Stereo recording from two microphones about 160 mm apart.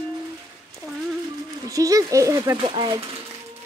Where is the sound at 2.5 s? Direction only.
35° right (ahead or behind).